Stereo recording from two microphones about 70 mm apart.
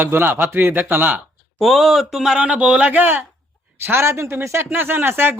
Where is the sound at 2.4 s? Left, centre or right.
Centre.